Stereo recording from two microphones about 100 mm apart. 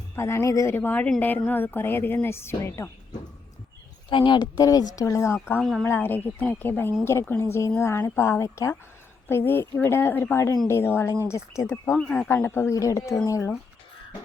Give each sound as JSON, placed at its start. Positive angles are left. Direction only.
{"t": 0.2, "sound": "speech", "side_deg": 25}
{"t": 0.8, "sound": "speech", "side_deg": 20}
{"t": 4.1, "sound": "speech", "side_deg": 55}
{"t": 11.7, "sound": "speech", "side_deg": 10}